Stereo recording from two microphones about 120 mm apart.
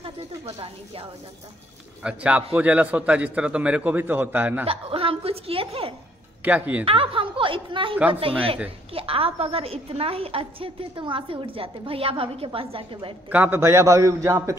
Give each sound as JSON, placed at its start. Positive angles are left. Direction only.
{"t": 2.0, "sound": "a man's voice", "side_deg": -10}
{"t": 4.6, "sound": "a woman's voice", "side_deg": -50}
{"t": 6.4, "sound": "a man's voice", "side_deg": -10}
{"t": 6.8, "sound": "a woman's voice", "side_deg": -50}
{"t": 13.3, "sound": "a man's voice", "side_deg": -15}